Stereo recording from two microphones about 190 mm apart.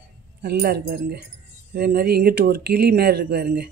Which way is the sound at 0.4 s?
55° right (ahead or behind).